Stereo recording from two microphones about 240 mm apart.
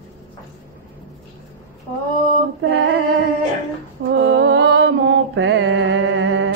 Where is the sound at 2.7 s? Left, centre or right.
Right.